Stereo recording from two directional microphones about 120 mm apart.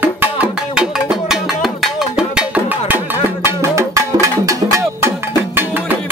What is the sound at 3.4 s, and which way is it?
Music, 25° right (ahead or behind).